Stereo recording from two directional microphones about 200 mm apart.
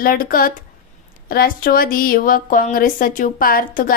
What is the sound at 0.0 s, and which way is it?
A woman's voice, 45° left (ahead or behind).